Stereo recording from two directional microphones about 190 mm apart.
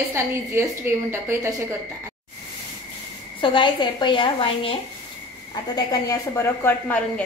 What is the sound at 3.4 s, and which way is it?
A woman's voice, 25° left (ahead or behind).